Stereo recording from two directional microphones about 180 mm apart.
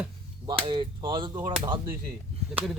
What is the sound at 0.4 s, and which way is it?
Speech, 25° right (ahead or behind).